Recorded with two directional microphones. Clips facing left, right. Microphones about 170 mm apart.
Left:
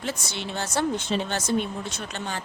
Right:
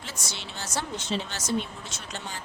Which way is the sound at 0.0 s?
55° left (ahead or behind).